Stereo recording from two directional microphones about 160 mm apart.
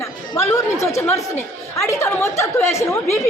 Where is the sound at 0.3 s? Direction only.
20° left (ahead or behind).